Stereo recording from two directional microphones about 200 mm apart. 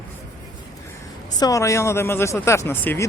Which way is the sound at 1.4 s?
15° left (ahead or behind).